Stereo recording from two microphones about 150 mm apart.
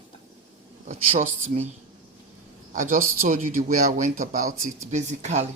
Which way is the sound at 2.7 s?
60° right (ahead or behind).